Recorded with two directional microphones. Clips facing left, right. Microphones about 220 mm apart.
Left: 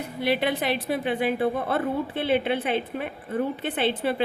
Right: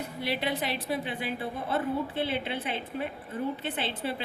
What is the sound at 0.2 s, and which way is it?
A woman's voice, 60° left (ahead or behind).